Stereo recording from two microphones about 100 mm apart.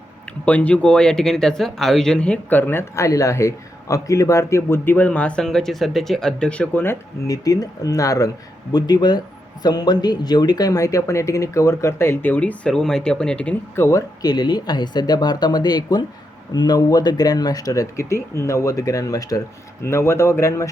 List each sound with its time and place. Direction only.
0.4 s speech: 15° left (ahead or behind)
7.3 s speech: 35° left (ahead or behind)
8.7 s speech: 45° left (ahead or behind); by 13.6 s 10° left (ahead or behind)
13.7 s speech: 25° left (ahead or behind)
14.2 s speech: 45° left (ahead or behind); by 20.7 s 30° left (ahead or behind)